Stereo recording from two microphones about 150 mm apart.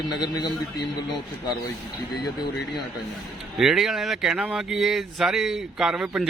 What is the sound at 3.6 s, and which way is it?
Speech, 5° right (ahead or behind).